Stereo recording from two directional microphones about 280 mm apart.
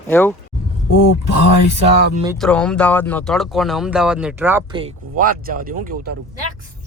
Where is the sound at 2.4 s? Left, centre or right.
Centre.